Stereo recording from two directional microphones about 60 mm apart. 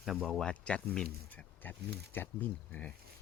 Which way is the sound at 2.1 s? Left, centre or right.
Left.